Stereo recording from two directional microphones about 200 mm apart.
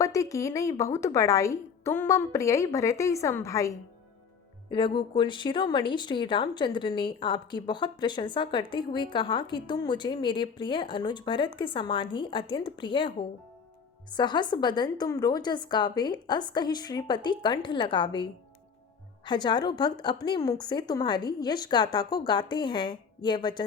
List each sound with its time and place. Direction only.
0.0 s a woman's voice: 15° left (ahead or behind)